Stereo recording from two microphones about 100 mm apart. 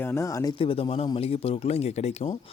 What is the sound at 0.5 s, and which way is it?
Speech, 65° left (ahead or behind).